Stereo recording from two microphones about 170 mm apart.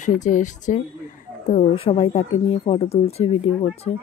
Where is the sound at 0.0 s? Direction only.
45° left (ahead or behind).